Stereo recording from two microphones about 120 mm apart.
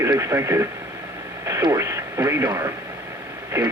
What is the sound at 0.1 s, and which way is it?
Speech, 25° right (ahead or behind).